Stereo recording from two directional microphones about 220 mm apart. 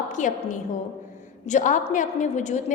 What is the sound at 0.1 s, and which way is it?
A woman's voice, 35° left (ahead or behind).